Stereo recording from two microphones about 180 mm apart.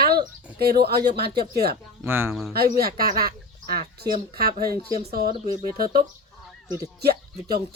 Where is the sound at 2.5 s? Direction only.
60° right (ahead or behind).